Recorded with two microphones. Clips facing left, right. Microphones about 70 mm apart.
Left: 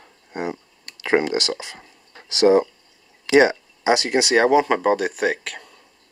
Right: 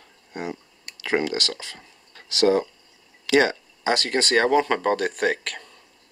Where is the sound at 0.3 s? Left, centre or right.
Left; by 5.8 s centre.